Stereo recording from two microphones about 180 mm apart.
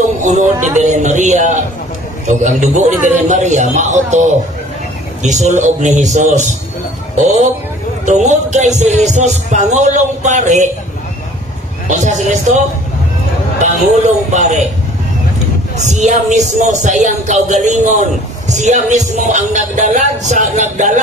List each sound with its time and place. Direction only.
0.2 s speech: 40° right (ahead or behind)
11.9 s speech: 40° right (ahead or behind)
15.8 s speech: 40° right (ahead or behind)